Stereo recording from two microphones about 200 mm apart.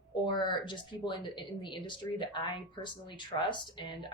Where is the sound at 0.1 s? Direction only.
20° left (ahead or behind).